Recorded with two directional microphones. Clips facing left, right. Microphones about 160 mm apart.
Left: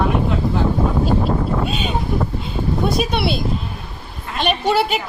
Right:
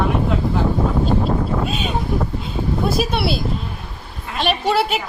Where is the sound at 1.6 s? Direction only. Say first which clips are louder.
Even; centre (ahead or behind).